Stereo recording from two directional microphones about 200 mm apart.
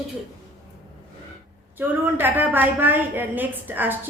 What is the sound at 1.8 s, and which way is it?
A woman's voice, 10° right (ahead or behind).